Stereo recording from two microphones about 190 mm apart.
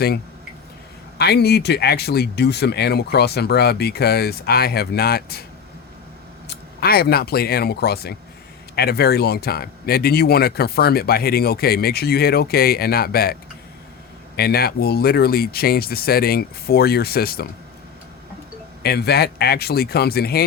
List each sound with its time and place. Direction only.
1.2 s speech: 60° left (ahead or behind)
6.5 s speech: 55° left (ahead or behind)
14.3 s speech: 55° left (ahead or behind)
18.8 s speech: 60° left (ahead or behind)